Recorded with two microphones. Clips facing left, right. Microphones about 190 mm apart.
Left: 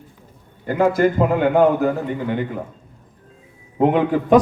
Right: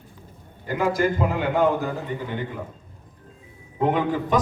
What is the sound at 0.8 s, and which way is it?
A man's voice, 55° left (ahead or behind).